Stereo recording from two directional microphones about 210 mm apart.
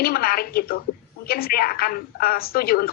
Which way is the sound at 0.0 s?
45° left (ahead or behind).